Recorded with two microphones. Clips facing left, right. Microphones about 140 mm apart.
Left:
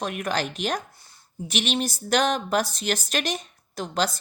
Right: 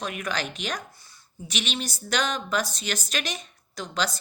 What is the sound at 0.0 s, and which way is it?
Speech, 50° left (ahead or behind).